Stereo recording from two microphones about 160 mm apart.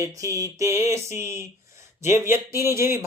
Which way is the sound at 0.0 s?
20° right (ahead or behind).